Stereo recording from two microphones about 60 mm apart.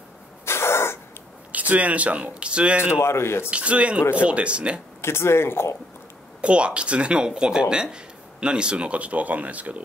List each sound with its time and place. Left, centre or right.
0.5 s cough: left
1.5 s speech: right
2.9 s speech: left
3.4 s speech: right
5.0 s speech: left
6.4 s speech: centre